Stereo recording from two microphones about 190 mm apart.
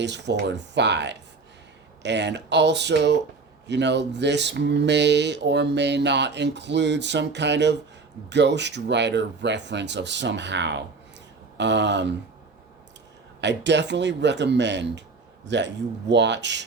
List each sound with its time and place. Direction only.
0.0 s speech: 65° right (ahead or behind)
13.4 s speech: 65° right (ahead or behind)